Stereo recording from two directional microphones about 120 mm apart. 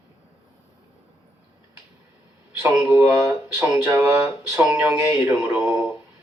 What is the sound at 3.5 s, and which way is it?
Speech, 20° right (ahead or behind).